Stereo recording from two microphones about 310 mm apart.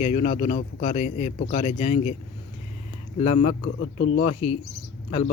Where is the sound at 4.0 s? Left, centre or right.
Left.